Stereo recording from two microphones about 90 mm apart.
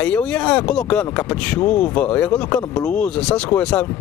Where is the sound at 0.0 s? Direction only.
15° left (ahead or behind).